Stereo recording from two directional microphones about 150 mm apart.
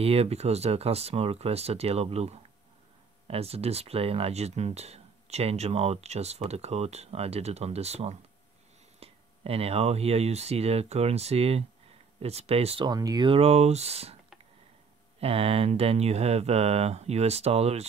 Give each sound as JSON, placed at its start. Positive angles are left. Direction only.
{"t": 0.0, "sound": "speech", "side_deg": -40}
{"t": 15.1, "sound": "speech", "side_deg": -40}